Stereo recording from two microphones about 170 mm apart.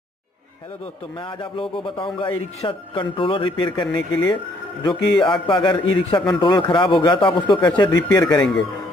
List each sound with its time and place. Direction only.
1.4 s speech: 30° left (ahead or behind)
8.4 s speech: centre (ahead or behind)